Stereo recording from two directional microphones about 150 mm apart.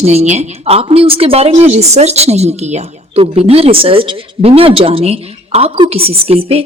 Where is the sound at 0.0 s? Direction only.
45° right (ahead or behind).